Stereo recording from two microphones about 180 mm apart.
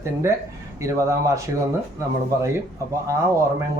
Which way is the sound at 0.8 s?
15° right (ahead or behind).